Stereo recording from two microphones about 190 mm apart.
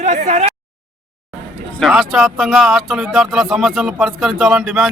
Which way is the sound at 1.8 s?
5° right (ahead or behind).